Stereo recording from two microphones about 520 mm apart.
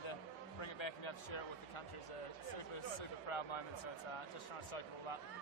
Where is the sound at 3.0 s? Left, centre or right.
Left.